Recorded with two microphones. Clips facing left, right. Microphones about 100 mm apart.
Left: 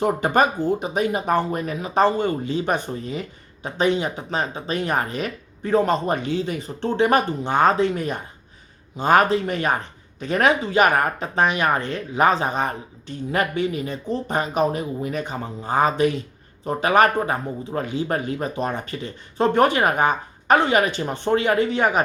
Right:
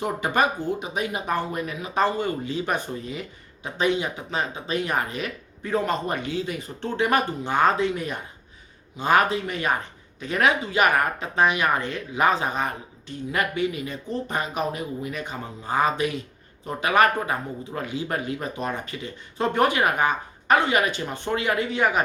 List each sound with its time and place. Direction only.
0.0 s speech: 40° left (ahead or behind)